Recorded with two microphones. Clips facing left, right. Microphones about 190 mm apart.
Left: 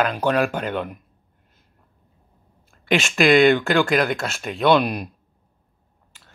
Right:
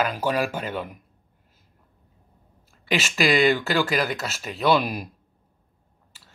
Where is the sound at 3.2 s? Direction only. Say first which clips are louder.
Left 5 dB; 55° left (ahead or behind).